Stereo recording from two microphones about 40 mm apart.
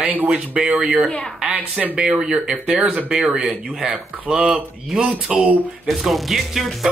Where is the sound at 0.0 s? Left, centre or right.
Right.